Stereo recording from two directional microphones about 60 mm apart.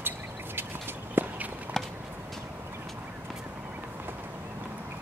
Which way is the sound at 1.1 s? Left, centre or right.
Right.